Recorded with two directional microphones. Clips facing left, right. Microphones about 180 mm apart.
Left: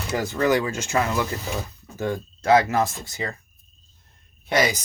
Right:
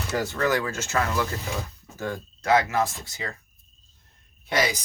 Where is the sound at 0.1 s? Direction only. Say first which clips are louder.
Left 3 dB; 10° left (ahead or behind); by 2.9 s 40° left (ahead or behind).